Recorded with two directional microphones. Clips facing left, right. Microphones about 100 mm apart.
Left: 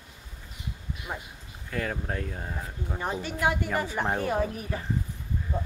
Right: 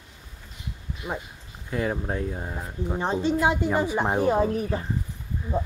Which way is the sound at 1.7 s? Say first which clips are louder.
Right 4 dB; 20° right (ahead or behind).